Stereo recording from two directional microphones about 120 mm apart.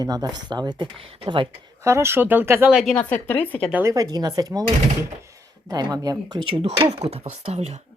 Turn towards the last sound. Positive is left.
turn(degrees=-55)  # may be behind; listen again after turning